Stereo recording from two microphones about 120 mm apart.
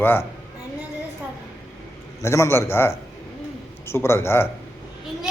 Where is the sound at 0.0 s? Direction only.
20° left (ahead or behind).